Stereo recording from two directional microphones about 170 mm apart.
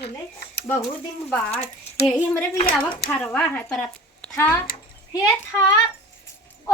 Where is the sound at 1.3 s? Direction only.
10° left (ahead or behind).